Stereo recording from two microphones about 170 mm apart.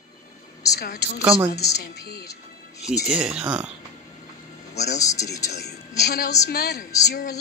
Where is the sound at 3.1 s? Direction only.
5° right (ahead or behind).